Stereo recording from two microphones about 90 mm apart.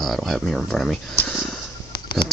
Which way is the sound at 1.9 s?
55° left (ahead or behind).